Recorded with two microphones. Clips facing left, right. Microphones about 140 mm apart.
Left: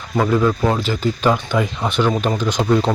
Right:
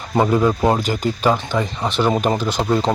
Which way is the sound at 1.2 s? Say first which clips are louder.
Left 1 dB; centre (ahead or behind).